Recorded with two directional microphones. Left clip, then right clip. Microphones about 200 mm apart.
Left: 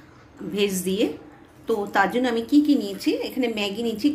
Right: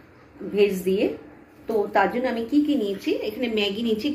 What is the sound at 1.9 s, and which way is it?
A woman's voice, 65° left (ahead or behind).